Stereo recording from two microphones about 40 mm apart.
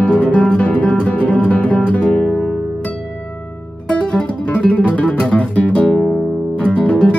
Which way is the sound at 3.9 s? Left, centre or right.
Left.